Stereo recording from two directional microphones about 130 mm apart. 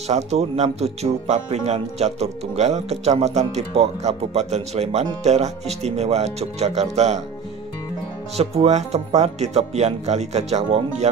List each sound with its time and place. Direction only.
0.1 s speech: 60° right (ahead or behind)
8.4 s speech: 55° right (ahead or behind)